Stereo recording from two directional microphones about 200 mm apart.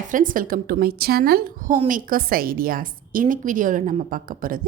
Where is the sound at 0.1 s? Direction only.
40° right (ahead or behind).